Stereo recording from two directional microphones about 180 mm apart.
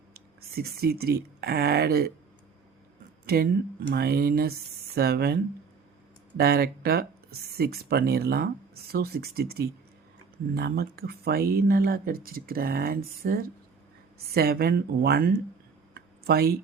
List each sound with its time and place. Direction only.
0.1 s speech: 60° right (ahead or behind)
3.2 s speech: 60° right (ahead or behind)
16.0 s a sound: 60° right (ahead or behind)